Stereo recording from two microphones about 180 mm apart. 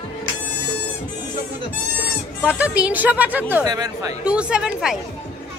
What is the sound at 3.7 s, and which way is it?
Speech, 20° right (ahead or behind).